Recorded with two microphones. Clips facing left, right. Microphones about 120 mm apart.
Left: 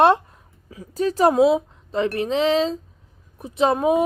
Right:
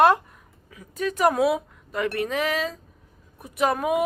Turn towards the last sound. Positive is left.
turn(degrees=25)  # may be behind; listen again after turning